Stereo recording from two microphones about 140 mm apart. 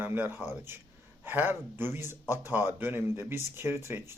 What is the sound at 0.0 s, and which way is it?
Speech, 15° right (ahead or behind).